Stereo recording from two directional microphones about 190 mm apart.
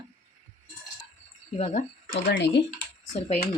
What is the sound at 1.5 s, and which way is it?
Speech, 40° left (ahead or behind).